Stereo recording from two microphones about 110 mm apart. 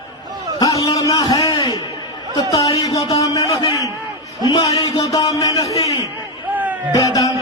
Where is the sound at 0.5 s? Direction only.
35° left (ahead or behind).